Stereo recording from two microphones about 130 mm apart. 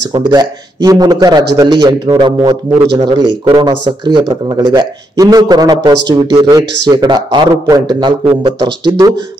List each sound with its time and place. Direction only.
0.1 s speech: 30° right (ahead or behind)
8.3 s speech: 50° right (ahead or behind)